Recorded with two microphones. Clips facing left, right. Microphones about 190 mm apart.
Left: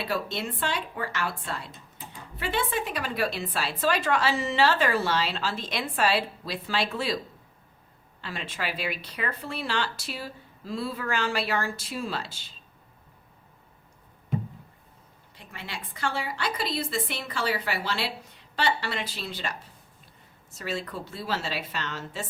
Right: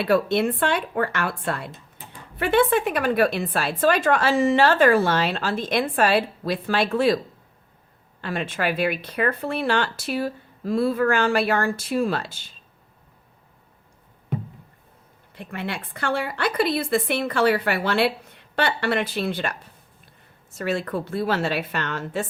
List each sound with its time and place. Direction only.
0.0 s a woman's voice: 60° right (ahead or behind)
8.2 s a woman's voice: 55° right (ahead or behind)
15.4 s a woman's voice: 60° right (ahead or behind)
20.6 s a woman's voice: 55° right (ahead or behind)